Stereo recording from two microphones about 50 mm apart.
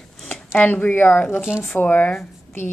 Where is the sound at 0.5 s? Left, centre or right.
Left.